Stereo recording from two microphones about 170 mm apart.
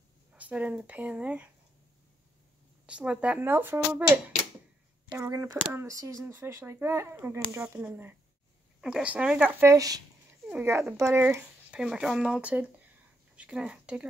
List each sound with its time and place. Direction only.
0.4 s speech: 10° right (ahead or behind)
2.9 s speech: 5° right (ahead or behind)